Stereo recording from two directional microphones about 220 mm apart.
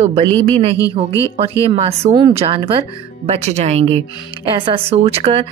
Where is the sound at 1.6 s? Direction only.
30° right (ahead or behind).